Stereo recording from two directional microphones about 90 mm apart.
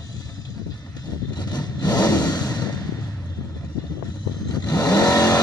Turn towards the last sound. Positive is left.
turn(degrees=35)  # may be behind; listen again after turning